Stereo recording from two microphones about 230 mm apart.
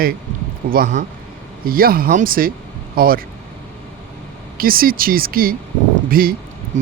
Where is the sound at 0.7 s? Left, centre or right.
Right.